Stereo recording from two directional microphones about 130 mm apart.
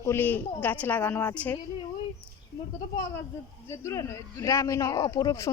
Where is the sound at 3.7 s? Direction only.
20° left (ahead or behind).